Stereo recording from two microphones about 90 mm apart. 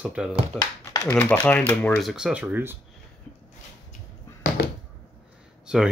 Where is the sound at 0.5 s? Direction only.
15° left (ahead or behind).